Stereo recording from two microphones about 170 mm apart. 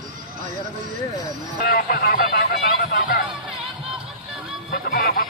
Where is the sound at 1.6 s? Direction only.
60° left (ahead or behind).